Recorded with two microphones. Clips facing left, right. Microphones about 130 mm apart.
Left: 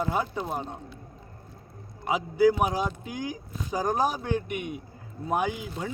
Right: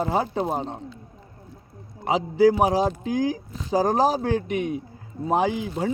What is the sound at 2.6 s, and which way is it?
Speech, 35° right (ahead or behind).